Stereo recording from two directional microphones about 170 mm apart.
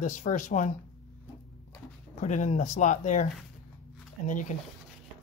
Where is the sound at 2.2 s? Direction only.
45° left (ahead or behind).